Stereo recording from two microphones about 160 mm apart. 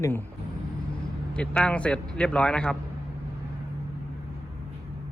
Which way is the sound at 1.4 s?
5° left (ahead or behind).